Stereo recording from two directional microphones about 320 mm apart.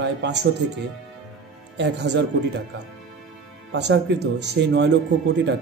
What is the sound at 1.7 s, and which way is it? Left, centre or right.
Speech, right.